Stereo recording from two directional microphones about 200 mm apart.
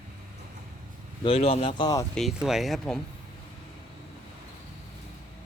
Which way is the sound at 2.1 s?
Centre (ahead or behind).